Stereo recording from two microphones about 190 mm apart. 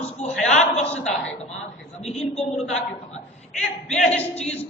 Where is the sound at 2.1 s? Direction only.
35° left (ahead or behind).